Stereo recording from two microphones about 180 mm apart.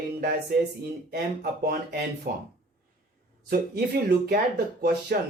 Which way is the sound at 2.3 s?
50° right (ahead or behind).